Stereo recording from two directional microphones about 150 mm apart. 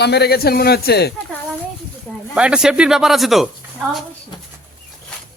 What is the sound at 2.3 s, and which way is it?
Speech, 5° right (ahead or behind).